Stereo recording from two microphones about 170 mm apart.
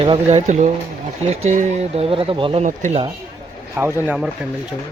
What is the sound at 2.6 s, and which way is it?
Speech, 45° right (ahead or behind).